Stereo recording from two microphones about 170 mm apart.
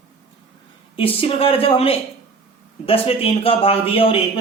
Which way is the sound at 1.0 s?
35° left (ahead or behind).